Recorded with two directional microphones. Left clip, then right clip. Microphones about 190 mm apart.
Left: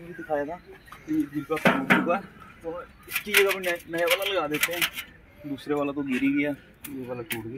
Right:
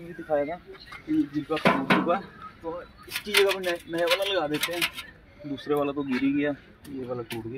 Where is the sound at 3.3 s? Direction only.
5° right (ahead or behind).